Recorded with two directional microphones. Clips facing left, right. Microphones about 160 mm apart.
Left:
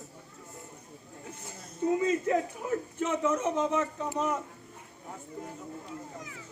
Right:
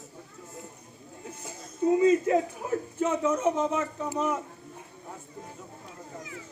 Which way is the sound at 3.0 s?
15° right (ahead or behind).